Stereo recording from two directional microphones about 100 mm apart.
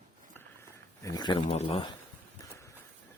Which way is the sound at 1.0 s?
40° left (ahead or behind).